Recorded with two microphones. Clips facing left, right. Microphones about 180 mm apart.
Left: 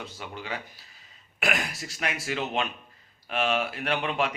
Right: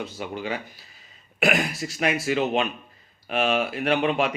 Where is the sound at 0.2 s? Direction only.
15° right (ahead or behind).